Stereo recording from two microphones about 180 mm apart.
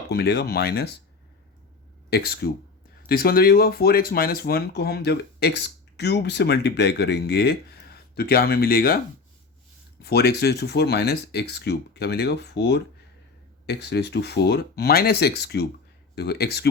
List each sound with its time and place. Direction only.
0.1 s speech: 60° left (ahead or behind)
2.0 s speech: 60° left (ahead or behind)
10.0 s speech: 60° left (ahead or behind)